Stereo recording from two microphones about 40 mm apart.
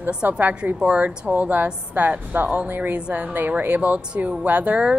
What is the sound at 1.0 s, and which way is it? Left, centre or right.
A woman's voice, right.